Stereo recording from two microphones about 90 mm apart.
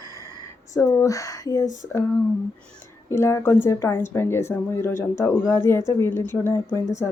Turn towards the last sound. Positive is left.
turn(degrees=30)  # may be behind; listen again after turning